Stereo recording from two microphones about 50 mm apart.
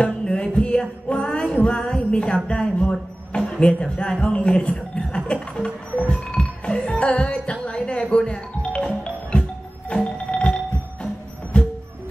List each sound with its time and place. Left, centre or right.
0.0 s a sound: centre
1.6 s music: centre
2.4 s speech: centre
5.9 s music: left
11.6 s music: centre